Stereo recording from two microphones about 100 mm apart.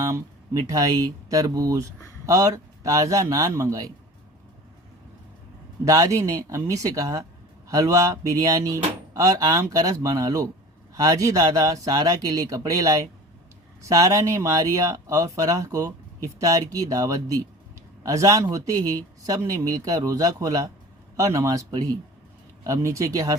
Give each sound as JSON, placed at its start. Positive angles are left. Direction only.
{"t": 0.0, "sound": "speech", "side_deg": -35}
{"t": 5.8, "sound": "speech", "side_deg": -35}